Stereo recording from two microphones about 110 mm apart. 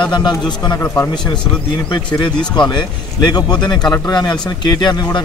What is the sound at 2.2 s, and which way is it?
A man's voice, 45° left (ahead or behind).